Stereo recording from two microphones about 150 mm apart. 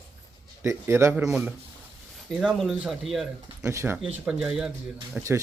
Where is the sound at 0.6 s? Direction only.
15° right (ahead or behind).